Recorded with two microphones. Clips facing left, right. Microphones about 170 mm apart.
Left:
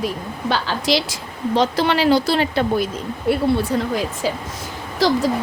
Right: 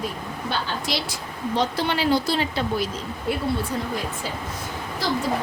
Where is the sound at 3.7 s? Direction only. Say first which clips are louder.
Left 7 dB; 75° left (ahead or behind).